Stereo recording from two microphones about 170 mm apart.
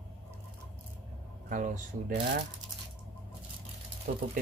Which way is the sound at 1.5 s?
50° right (ahead or behind).